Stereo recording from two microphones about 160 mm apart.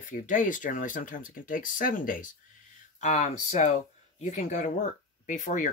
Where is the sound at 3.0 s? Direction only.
45° left (ahead or behind).